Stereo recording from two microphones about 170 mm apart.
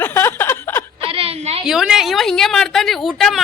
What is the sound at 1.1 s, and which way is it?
Speech, 35° right (ahead or behind).